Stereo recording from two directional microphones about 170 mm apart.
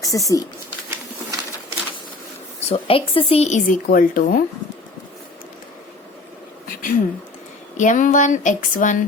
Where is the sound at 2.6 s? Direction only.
35° left (ahead or behind); by 4.4 s 55° left (ahead or behind).